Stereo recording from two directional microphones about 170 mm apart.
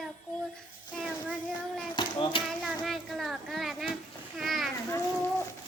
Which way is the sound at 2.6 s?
Centre (ahead or behind).